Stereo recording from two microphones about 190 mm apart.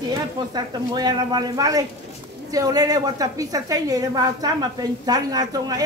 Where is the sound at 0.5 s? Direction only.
20° right (ahead or behind).